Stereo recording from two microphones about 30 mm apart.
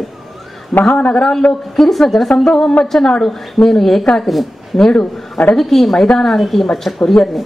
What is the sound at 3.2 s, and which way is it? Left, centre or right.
Speech, centre.